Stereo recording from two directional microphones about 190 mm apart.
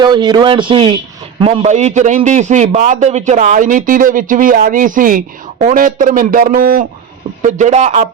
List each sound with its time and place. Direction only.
0.0 s a man's voice: 25° right (ahead or behind)